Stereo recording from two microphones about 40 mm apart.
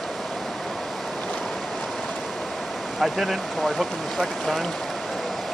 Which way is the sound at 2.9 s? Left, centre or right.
Centre.